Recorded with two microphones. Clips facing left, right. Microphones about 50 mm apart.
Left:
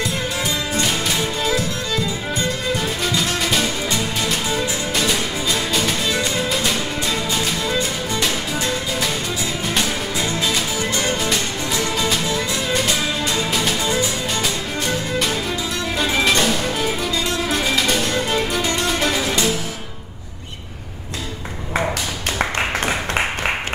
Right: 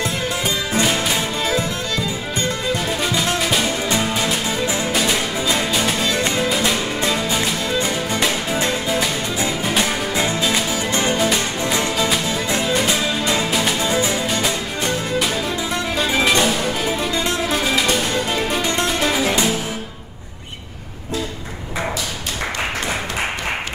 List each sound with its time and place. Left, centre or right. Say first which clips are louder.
1.1 s music: even; right
3.6 s music: right 2 dB; centre
6.1 s music: right 1 dB; right
6.5 s music: right 2 dB; centre; by 9.0 s right
10.4 s music: right 1 dB; centre
13.2 s music: right 2 dB; centre
13.8 s music: right 2 dB; right
16.0 s music: right 1 dB; centre
17.0 s music: right 1 dB; right
17.5 s music: even; centre
18.6 s music: right 1 dB; right
18.9 s music: right 1 dB; centre
19.2 s music: right 2 dB; centre